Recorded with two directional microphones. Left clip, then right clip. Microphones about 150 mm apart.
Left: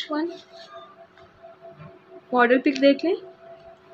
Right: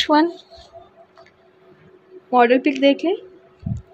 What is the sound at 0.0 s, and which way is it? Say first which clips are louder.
Speech: right 12 dB; 60° right (ahead or behind).